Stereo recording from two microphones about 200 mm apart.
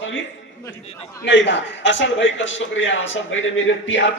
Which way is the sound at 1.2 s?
65° left (ahead or behind).